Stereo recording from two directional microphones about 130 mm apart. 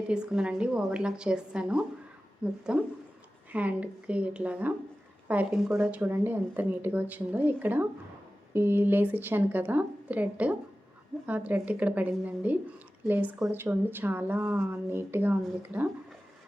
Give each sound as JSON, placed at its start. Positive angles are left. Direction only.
{"t": 0.1, "sound": "speech", "side_deg": -5}